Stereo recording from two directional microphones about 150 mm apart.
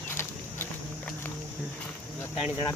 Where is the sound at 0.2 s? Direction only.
15° left (ahead or behind).